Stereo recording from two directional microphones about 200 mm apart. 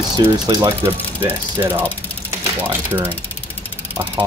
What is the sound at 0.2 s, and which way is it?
Speech, 20° right (ahead or behind).